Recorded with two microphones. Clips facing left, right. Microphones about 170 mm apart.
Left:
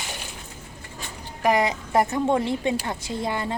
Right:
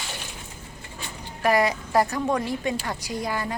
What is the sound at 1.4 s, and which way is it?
A woman's voice, 20° left (ahead or behind).